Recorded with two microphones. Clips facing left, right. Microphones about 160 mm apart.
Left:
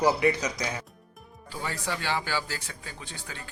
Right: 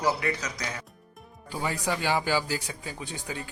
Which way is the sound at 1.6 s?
15° right (ahead or behind).